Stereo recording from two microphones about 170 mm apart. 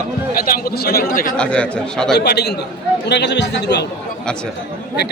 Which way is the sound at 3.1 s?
90° left.